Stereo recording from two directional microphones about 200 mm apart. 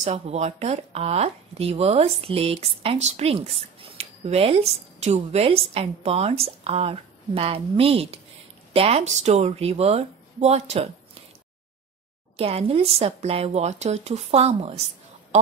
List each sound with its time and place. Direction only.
0.0 s speech: 35° right (ahead or behind)
12.4 s speech: 30° right (ahead or behind)